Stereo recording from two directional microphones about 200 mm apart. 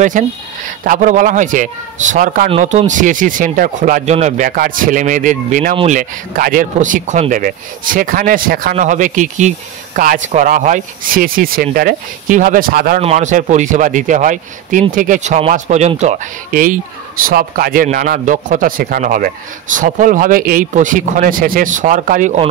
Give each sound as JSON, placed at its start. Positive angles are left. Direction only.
{"t": 0.2, "sound": "speech", "side_deg": -40}